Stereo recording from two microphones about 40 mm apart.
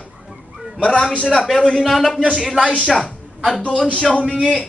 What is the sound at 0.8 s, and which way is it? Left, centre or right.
Speech, left.